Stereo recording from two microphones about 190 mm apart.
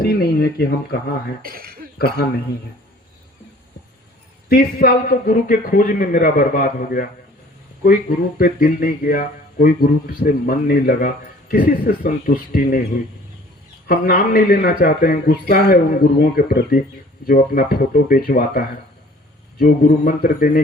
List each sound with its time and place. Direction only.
0.0 s speech: 55° left (ahead or behind)
1.4 s cough: 50° right (ahead or behind)
2.0 s speech: 55° left (ahead or behind)
4.4 s speech: 50° left (ahead or behind)
13.8 s speech: 50° left (ahead or behind)